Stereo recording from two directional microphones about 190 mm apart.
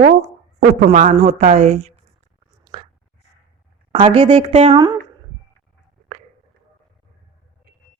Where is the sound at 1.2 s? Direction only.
40° right (ahead or behind).